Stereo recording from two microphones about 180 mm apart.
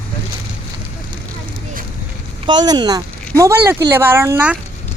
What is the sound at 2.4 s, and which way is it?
Speech, 25° right (ahead or behind).